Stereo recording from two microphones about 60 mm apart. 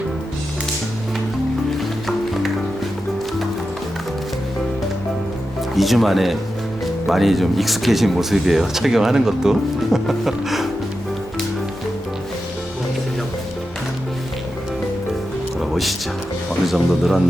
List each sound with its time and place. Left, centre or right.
5.7 s speech: centre
15.7 s music: centre
16.6 s speech: centre